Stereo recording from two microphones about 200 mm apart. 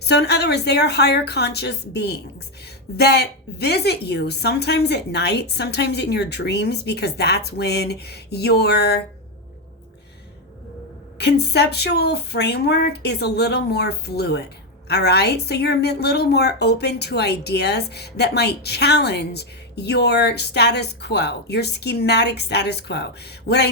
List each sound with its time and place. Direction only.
0.0 s a woman's voice: 55° left (ahead or behind)
11.2 s a woman's voice: 55° left (ahead or behind)